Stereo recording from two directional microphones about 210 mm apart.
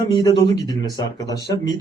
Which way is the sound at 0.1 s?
20° left (ahead or behind).